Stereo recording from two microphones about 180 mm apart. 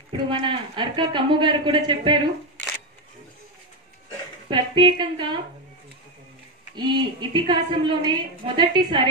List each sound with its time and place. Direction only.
0.3 s a woman's voice: 30° right (ahead or behind)
4.5 s a woman's voice: 25° right (ahead or behind)
6.8 s a woman's voice: 25° right (ahead or behind)